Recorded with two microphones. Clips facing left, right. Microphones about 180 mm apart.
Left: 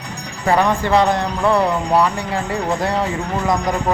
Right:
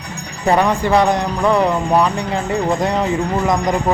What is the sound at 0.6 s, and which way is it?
Speech, 15° right (ahead or behind).